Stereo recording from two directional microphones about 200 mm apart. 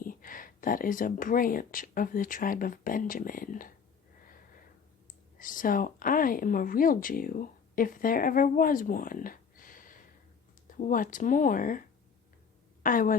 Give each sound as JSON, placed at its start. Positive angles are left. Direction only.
{"t": 0.0, "sound": "speech", "side_deg": 45}
{"t": 5.4, "sound": "a woman's voice", "side_deg": 45}